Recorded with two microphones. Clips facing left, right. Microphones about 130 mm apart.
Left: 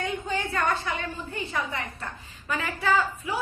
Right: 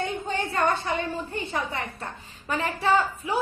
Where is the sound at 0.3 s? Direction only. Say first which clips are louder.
Right 3 dB; 35° right (ahead or behind).